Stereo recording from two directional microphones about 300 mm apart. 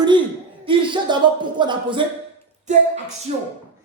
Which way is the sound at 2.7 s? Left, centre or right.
Right.